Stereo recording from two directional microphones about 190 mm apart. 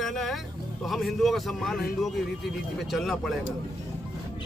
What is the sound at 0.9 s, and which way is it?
Speech, centre (ahead or behind).